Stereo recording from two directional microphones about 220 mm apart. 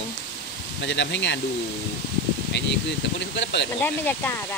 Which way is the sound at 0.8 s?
55° left (ahead or behind).